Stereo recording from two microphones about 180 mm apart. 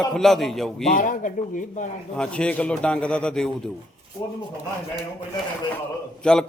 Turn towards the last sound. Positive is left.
turn(degrees=5)  # may be behind; listen again after turning